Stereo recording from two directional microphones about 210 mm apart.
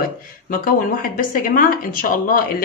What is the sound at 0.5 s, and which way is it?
Speech, 40° left (ahead or behind).